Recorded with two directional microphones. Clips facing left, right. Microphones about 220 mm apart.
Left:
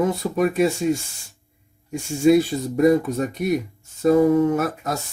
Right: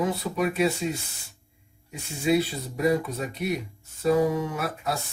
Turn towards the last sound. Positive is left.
turn(degrees=45)  # may be behind; listen again after turning